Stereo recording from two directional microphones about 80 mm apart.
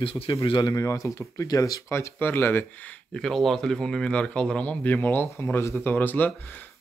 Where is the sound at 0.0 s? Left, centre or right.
Left.